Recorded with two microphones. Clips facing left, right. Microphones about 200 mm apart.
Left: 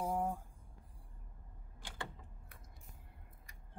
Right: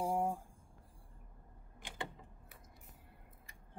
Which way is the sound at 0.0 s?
30° right (ahead or behind).